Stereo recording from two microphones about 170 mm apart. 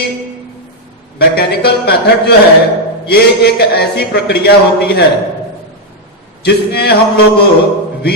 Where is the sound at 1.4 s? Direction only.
70° left (ahead or behind).